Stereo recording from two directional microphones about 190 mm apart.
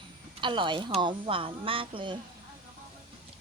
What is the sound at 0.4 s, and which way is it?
Speech, 25° right (ahead or behind).